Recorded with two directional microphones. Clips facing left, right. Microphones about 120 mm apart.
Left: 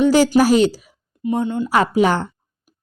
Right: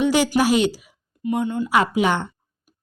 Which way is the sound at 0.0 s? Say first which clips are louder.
Left 5 dB; 35° left (ahead or behind).